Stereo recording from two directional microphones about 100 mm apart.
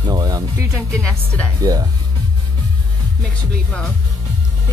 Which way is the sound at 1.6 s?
40° right (ahead or behind).